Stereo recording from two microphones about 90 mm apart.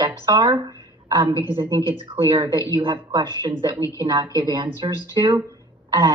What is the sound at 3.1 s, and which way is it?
Speech, 55° right (ahead or behind).